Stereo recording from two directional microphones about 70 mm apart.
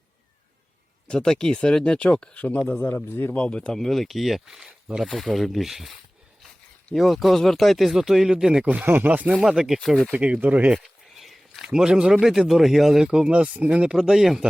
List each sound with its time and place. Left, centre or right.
1.0 s speech: centre
2.8 s speech: left
3.3 s speech: centre
6.9 s speech: centre
8.9 s speech: right
9.4 s speech: centre
10.1 s speech: centre
10.8 s a sound: centre
11.6 s speech: centre